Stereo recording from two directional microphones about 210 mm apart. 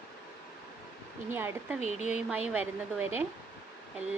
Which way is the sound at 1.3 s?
10° right (ahead or behind).